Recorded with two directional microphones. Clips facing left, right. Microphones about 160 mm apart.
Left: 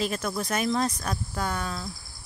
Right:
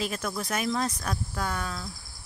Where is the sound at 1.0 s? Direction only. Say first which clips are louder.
Left 1 dB; 10° left (ahead or behind).